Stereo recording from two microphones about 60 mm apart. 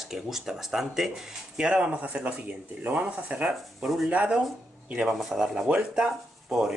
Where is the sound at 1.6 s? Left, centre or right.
Centre.